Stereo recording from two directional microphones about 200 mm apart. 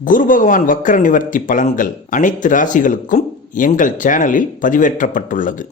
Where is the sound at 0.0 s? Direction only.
40° left (ahead or behind).